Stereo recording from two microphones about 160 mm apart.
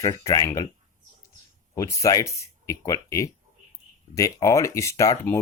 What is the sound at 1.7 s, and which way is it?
Speech, 20° left (ahead or behind).